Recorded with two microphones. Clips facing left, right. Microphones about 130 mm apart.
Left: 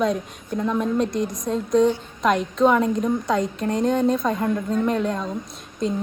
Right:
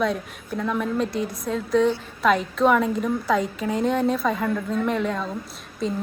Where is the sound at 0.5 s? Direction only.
20° left (ahead or behind).